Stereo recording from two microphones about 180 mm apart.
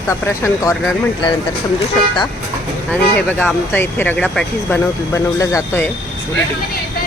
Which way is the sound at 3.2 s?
10° left (ahead or behind).